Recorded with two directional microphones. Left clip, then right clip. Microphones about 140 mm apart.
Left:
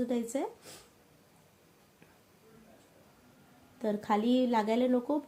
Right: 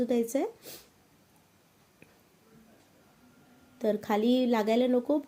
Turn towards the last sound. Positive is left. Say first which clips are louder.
# right 3 dB
turn(degrees=-30)  # may be behind; listen again after turning